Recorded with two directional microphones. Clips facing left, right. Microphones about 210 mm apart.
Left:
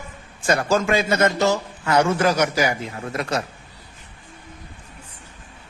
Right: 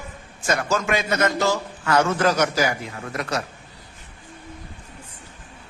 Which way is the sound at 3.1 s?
25° left (ahead or behind).